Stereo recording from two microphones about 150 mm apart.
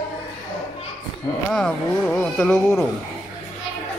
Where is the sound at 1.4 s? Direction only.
5° left (ahead or behind).